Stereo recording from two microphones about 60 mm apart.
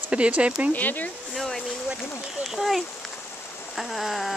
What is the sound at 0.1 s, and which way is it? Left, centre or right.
Speech, centre.